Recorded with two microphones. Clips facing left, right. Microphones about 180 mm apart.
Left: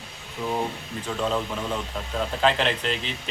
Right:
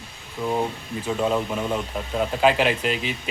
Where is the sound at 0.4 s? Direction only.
10° right (ahead or behind).